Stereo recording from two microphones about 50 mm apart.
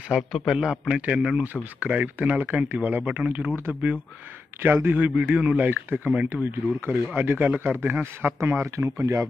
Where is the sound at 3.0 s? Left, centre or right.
Right.